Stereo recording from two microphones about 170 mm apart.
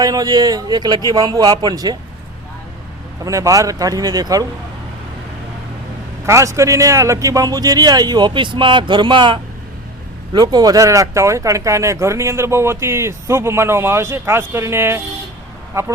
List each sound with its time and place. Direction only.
0.0 s a man's voice: 20° right (ahead or behind)
3.2 s a man's voice: 20° right (ahead or behind)
6.2 s a man's voice: 15° right (ahead or behind)